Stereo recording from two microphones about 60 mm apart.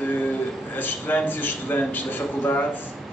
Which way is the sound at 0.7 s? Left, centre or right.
Left.